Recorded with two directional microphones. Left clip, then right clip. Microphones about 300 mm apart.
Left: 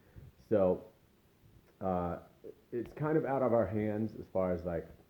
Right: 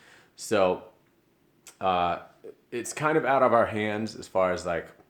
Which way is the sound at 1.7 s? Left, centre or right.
Centre.